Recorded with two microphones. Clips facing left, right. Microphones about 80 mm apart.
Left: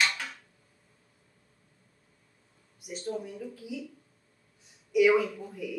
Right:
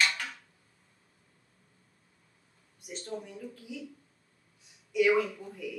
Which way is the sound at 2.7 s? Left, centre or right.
Centre.